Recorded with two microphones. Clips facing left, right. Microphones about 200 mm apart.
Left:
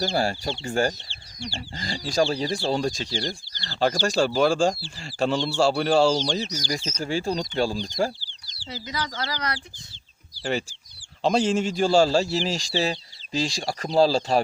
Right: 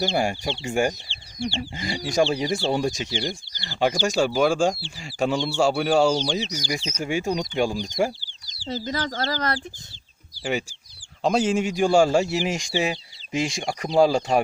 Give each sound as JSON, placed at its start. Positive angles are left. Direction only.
{"t": 0.1, "sound": "speech", "side_deg": -15}
{"t": 2.6, "sound": "speech", "side_deg": 0}
{"t": 3.0, "sound": "speech", "side_deg": -20}
{"t": 8.6, "sound": "speech", "side_deg": -40}
{"t": 11.2, "sound": "speech", "side_deg": -5}